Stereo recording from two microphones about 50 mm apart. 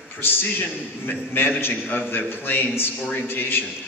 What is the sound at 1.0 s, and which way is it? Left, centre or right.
A man's voice, left.